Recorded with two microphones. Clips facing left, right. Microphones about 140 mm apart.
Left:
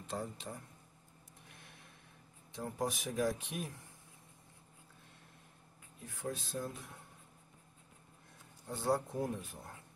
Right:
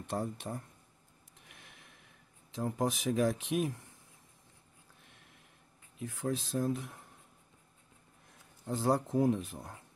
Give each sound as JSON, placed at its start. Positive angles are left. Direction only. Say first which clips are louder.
{"t": 0.1, "sound": "speech", "louder": "right 5 dB", "side_deg": -65}
{"t": 1.4, "sound": "a sound", "louder": "right 1 dB", "side_deg": -90}
{"t": 2.5, "sound": "speech", "louder": "right 5 dB", "side_deg": -90}
{"t": 5.9, "sound": "speech", "louder": "right 6 dB", "side_deg": -90}
{"t": 8.6, "sound": "speech", "louder": "right 4 dB", "side_deg": -90}